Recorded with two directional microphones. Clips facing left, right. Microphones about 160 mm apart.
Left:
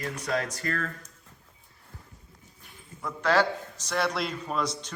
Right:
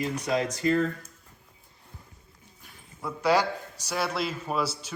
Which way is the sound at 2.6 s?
10° right (ahead or behind).